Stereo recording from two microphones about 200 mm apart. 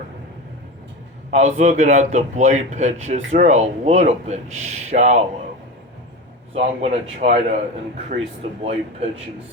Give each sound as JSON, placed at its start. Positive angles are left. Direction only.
{"t": 1.3, "sound": "a man's voice", "side_deg": -35}
{"t": 6.5, "sound": "a man's voice", "side_deg": -35}
{"t": 8.6, "sound": "a man's voice", "side_deg": -30}